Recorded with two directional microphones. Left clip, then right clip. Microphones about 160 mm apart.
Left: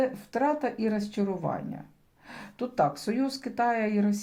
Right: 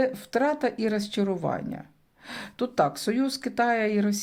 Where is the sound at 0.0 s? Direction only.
30° right (ahead or behind).